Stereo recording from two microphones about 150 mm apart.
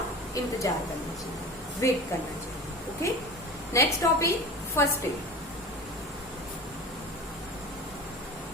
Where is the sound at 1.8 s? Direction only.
20° left (ahead or behind).